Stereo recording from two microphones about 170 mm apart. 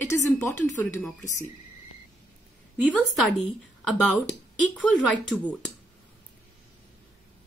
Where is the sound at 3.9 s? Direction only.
5° right (ahead or behind).